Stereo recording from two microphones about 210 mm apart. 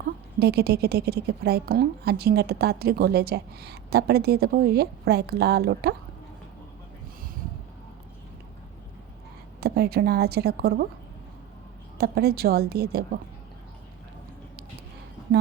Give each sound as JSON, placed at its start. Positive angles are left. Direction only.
{"t": 0.3, "sound": "a woman's voice", "side_deg": -50}
{"t": 9.6, "sound": "a woman's voice", "side_deg": -50}
{"t": 11.9, "sound": "a woman's voice", "side_deg": -50}